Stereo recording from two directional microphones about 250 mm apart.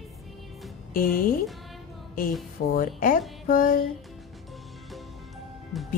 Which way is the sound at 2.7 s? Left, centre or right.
Left.